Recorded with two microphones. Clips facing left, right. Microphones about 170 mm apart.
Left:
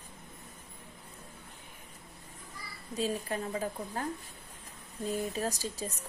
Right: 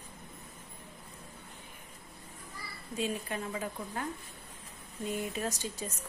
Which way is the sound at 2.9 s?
35° left (ahead or behind).